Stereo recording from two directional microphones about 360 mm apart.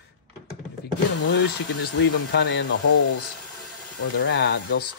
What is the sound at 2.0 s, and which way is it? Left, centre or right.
Speech, left.